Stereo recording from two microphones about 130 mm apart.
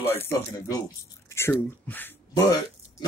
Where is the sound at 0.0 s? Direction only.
15° left (ahead or behind).